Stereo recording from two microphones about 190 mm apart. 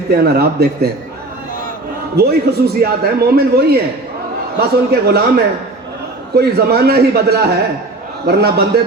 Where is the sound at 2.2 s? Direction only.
55° right (ahead or behind).